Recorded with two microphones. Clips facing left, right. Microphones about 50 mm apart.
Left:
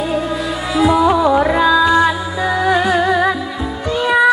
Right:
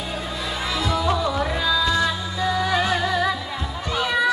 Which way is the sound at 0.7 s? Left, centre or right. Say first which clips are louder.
Left 11 dB; centre.